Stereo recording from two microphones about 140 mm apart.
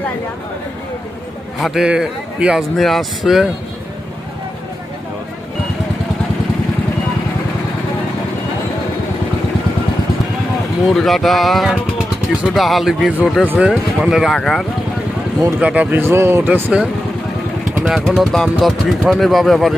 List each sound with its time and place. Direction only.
1.5 s a man's voice: centre (ahead or behind)
10.8 s a man's voice: centre (ahead or behind)
15.6 s a man's voice: 10° right (ahead or behind)